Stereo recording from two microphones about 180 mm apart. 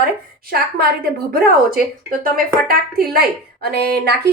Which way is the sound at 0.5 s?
60° right (ahead or behind).